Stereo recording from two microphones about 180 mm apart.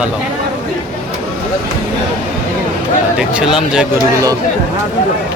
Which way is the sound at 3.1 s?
5° right (ahead or behind).